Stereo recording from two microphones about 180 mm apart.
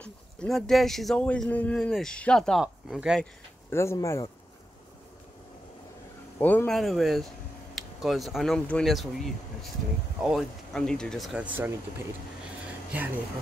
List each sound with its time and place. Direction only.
0.0 s speech: 5° left (ahead or behind)
3.7 s speech: 15° left (ahead or behind)
6.4 s speech: 10° left (ahead or behind); by 11.7 s 10° right (ahead or behind)
12.9 s speech: 10° right (ahead or behind)